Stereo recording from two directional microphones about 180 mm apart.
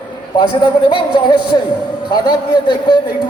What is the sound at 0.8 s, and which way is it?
Speech, 25° left (ahead or behind).